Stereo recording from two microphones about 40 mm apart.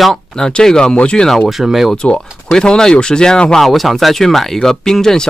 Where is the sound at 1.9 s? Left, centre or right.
Left.